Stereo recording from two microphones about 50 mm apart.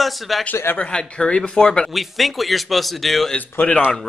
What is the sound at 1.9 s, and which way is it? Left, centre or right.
Speech, centre.